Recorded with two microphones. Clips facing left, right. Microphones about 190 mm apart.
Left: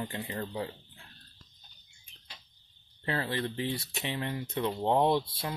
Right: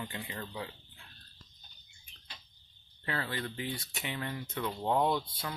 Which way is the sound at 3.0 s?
30° left (ahead or behind).